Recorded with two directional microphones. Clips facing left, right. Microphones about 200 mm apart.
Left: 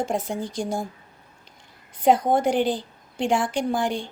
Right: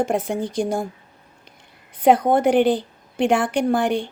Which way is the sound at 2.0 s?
60° right (ahead or behind).